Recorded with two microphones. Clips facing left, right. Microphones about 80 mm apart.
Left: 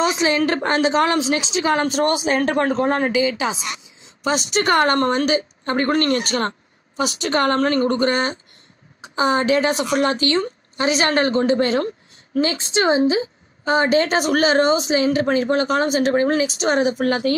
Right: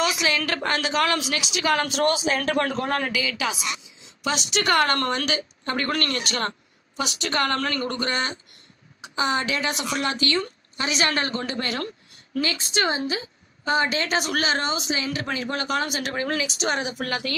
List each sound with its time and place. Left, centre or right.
0.0 s a woman's voice: left
1.9 s speech: left
2.3 s a woman's voice: left
3.6 s speech: left
10.2 s a woman's voice: left
13.7 s speech: left